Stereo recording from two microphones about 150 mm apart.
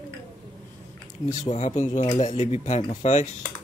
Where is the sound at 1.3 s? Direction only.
55° left (ahead or behind).